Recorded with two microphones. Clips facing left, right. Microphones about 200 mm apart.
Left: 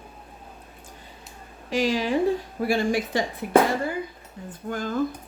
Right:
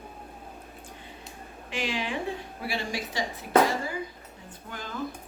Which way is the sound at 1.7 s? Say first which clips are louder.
Left 8 dB; 40° left (ahead or behind).